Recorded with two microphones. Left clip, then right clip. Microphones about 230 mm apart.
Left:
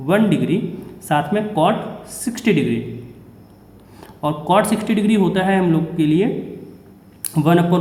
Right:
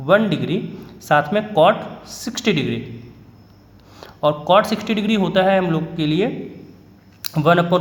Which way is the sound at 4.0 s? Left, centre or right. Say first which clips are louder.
Right 4 dB; right.